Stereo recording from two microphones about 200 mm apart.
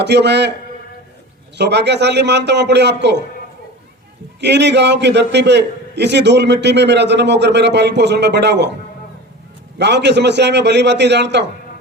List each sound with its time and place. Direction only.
0.0 s a man's voice: 60° right (ahead or behind)
1.5 s a man's voice: 60° right (ahead or behind)
4.4 s a man's voice: 60° right (ahead or behind)
9.7 s a man's voice: 60° right (ahead or behind)